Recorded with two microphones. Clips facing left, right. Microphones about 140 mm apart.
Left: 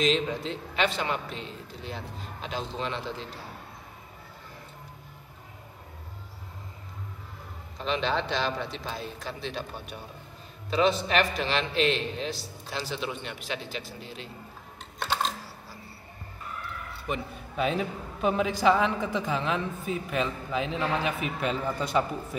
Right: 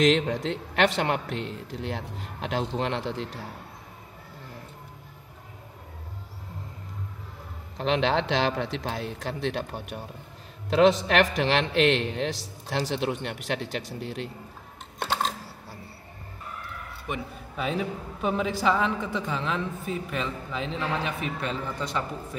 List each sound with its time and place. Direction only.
0.0 s a man's voice: 75° right (ahead or behind)
7.7 s a man's voice: 75° right (ahead or behind)
17.1 s a man's voice: centre (ahead or behind)